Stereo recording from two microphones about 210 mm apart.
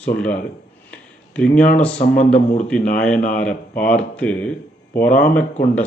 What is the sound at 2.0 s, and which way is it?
Speech, 35° left (ahead or behind).